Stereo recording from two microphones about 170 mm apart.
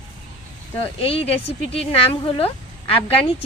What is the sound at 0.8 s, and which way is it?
Speech, 35° left (ahead or behind).